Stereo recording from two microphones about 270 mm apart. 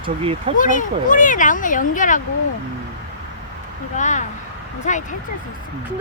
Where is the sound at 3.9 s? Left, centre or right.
Left.